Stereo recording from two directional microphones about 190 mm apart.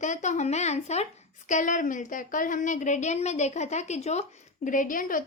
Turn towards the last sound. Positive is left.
turn(degrees=45)  # may be behind; listen again after turning